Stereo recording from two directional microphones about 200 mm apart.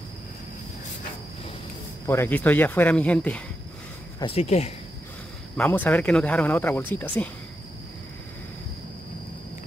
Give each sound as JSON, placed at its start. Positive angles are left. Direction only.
{"t": 2.0, "sound": "speech", "side_deg": 10}
{"t": 4.2, "sound": "speech", "side_deg": 30}
{"t": 5.6, "sound": "speech", "side_deg": 10}